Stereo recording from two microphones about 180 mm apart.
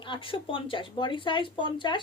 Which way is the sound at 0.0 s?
30° left (ahead or behind).